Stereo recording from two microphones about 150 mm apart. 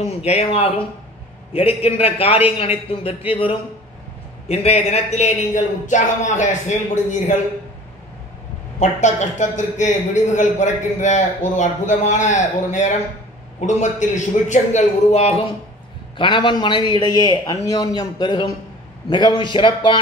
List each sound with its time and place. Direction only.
0.2 s a man's voice: 45° left (ahead or behind)
8.7 s a man's voice: 55° left (ahead or behind)
16.2 s a man's voice: 30° left (ahead or behind)